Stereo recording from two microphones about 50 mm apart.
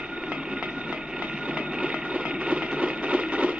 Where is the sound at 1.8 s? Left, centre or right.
Right.